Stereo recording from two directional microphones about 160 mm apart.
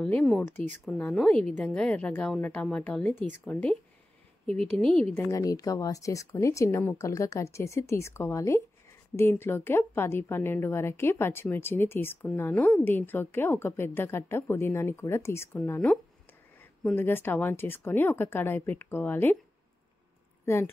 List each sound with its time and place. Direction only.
0.0 s a woman's voice: 5° left (ahead or behind)
4.7 s speech: 5° left (ahead or behind)
5.3 s a woman's voice: 20° left (ahead or behind)
20.4 s a woman's voice: 15° left (ahead or behind)